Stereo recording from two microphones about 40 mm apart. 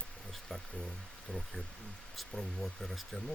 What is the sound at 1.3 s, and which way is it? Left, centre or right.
Speech, left.